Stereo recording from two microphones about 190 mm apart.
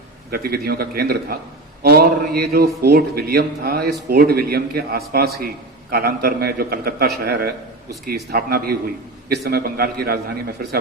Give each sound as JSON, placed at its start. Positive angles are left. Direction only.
{"t": 0.3, "sound": "a man's voice", "side_deg": -55}